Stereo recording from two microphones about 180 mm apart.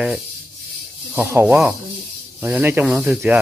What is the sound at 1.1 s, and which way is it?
Speech, 10° right (ahead or behind).